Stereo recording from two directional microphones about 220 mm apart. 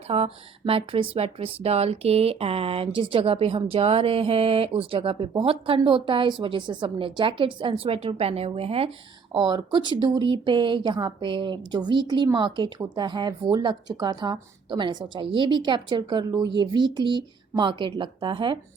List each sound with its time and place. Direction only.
0.1 s speech: 25° right (ahead or behind)